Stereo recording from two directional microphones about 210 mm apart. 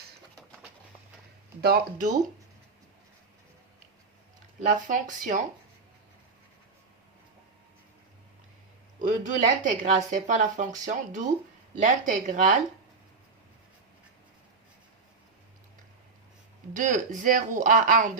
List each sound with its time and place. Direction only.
1.6 s speech: 45° right (ahead or behind)
4.7 s speech: 35° right (ahead or behind)
9.0 s speech: 40° right (ahead or behind)
16.7 s speech: 35° right (ahead or behind)